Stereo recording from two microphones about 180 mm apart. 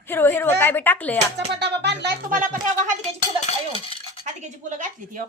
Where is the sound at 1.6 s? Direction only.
70° right (ahead or behind).